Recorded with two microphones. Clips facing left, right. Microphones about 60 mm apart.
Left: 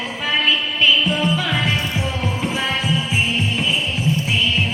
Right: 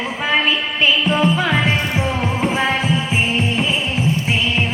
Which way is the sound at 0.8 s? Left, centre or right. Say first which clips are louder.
Right 2 dB; right.